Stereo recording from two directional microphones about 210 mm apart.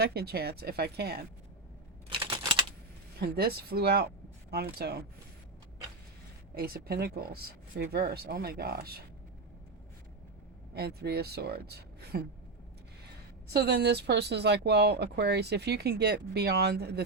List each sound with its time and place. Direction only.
0.0 s speech: 50° right (ahead or behind)
2.0 s typing: 25° right (ahead or behind)
3.2 s speech: 50° right (ahead or behind)
6.5 s speech: 45° right (ahead or behind)
10.8 s speech: 50° right (ahead or behind)
13.5 s speech: 50° right (ahead or behind)